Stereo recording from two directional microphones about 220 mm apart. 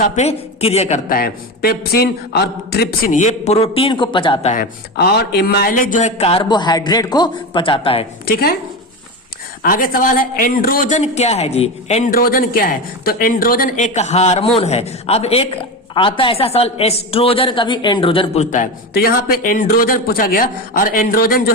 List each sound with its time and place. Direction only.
0.0 s speech: 30° left (ahead or behind)
4.5 s a man's voice: 50° left (ahead or behind); by 8.0 s 25° left (ahead or behind)
8.2 s speech: 45° left (ahead or behind)
9.6 s speech: 40° left (ahead or behind)
12.1 s a man's voice: 40° left (ahead or behind); by 18.4 s 25° left (ahead or behind)
18.5 s speech: 40° left (ahead or behind)